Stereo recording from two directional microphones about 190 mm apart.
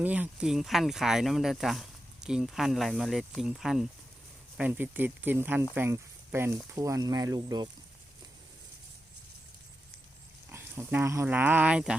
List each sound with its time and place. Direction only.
0.0 s speech: 10° right (ahead or behind)
10.5 s speech: 15° right (ahead or behind)